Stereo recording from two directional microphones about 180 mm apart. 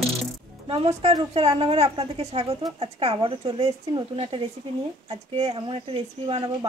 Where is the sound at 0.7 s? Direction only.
35° right (ahead or behind).